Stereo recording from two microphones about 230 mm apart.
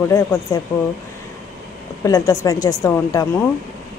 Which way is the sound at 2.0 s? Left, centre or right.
Centre.